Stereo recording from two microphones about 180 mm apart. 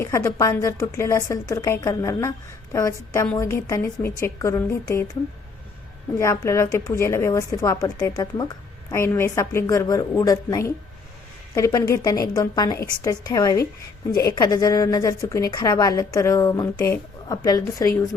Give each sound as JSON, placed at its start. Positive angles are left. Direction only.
{"t": 0.0, "sound": "a woman's voice", "side_deg": 15}
{"t": 6.1, "sound": "a woman's voice", "side_deg": 15}